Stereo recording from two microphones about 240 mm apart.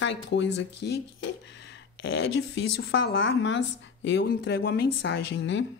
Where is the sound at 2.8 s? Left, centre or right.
Left.